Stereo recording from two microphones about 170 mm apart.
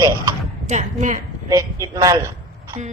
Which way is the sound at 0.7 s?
45° right (ahead or behind).